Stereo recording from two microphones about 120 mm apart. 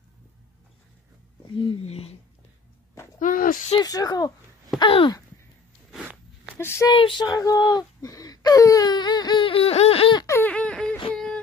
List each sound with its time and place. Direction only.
1.9 s speech: 60° left (ahead or behind)
3.2 s a sound: 90° left
3.8 s speech: 30° left (ahead or behind)
4.7 s speech: 40° left (ahead or behind)
6.6 s speech: 20° left (ahead or behind)
6.9 s child singing: 40° left (ahead or behind)
7.2 s whimper: 30° left (ahead or behind); by 10.1 s 55° left (ahead or behind)
10.2 s a sound: 20° left (ahead or behind)
10.5 s a sound: 10° left (ahead or behind)